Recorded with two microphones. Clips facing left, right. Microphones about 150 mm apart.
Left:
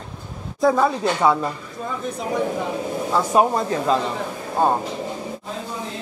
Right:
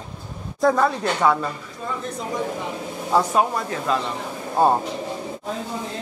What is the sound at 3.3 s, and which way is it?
Speech, 25° left (ahead or behind).